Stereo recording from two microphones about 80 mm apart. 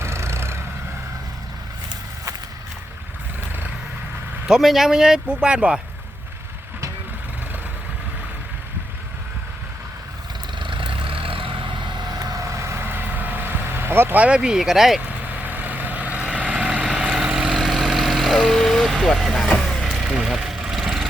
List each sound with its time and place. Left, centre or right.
0.0 s vehicle: right
4.4 s speech: centre
10.6 s vehicle: right
12.1 s vehicle: right; by 15.0 s centre
15.0 s vehicle: right; by 21.1 s centre